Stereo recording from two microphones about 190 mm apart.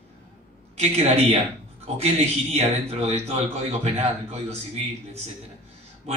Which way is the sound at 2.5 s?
35° right (ahead or behind).